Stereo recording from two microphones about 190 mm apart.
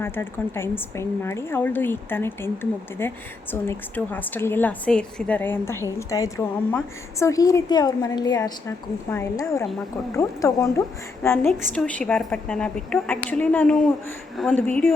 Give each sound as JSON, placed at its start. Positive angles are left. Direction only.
{"t": 0.0, "sound": "a woman's voice", "side_deg": 10}